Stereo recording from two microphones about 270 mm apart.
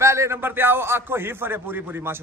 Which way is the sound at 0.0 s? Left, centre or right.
Centre.